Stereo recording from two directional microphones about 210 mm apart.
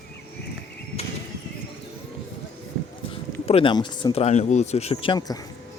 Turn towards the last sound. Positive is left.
turn(degrees=20)  # may be behind; listen again after turning